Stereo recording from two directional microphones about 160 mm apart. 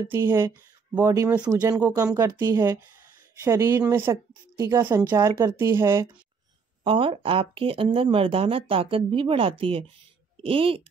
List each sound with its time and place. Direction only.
0.1 s speech: 15° right (ahead or behind)
6.8 s speech: 35° right (ahead or behind)